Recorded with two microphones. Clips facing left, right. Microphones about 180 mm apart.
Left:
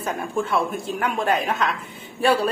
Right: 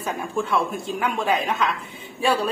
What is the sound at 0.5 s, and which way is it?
A woman's voice, centre (ahead or behind).